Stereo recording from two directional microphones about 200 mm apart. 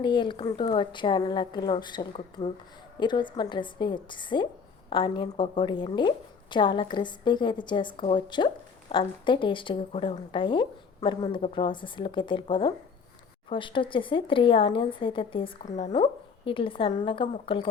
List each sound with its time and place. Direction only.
0.0 s a woman's voice: 25° left (ahead or behind)